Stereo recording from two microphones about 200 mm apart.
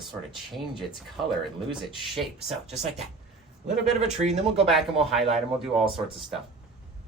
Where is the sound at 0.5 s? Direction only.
Centre (ahead or behind).